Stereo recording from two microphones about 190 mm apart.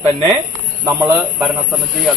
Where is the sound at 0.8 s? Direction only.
15° right (ahead or behind).